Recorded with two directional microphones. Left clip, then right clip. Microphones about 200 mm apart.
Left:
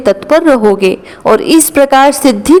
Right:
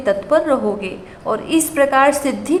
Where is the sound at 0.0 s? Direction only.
50° left (ahead or behind).